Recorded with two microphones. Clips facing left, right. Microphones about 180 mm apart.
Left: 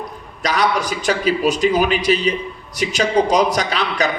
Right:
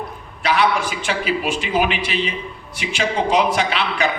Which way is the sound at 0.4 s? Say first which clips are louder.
Even; 40° left (ahead or behind).